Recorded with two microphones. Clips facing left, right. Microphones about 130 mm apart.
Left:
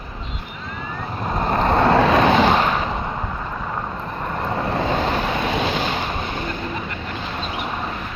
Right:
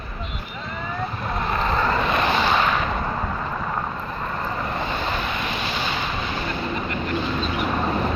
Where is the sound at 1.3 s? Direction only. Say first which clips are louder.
Left 6 dB; 40° left (ahead or behind); by 2.5 s 80° left.